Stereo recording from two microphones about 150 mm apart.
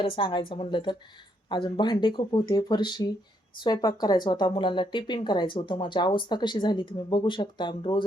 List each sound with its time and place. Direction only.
0.0 s speech: 30° left (ahead or behind)